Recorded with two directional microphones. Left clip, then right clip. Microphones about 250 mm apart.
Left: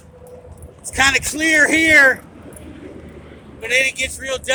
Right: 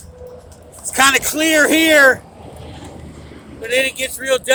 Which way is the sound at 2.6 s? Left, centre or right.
Right.